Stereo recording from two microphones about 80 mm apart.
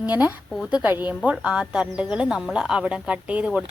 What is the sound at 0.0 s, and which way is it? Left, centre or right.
A woman's voice, centre.